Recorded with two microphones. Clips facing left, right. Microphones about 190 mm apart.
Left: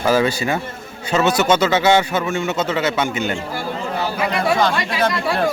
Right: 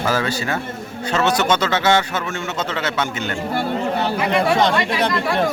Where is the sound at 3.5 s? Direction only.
60° right (ahead or behind).